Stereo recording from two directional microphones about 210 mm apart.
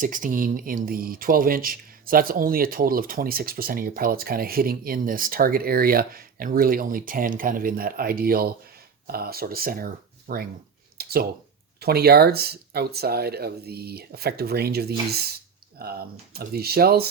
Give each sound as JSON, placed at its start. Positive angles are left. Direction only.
{"t": 0.0, "sound": "speech", "side_deg": -40}
{"t": 10.9, "sound": "a sound", "side_deg": -45}
{"t": 11.8, "sound": "speech", "side_deg": -50}